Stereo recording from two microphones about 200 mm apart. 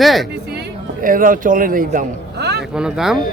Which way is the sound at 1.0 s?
45° right (ahead or behind).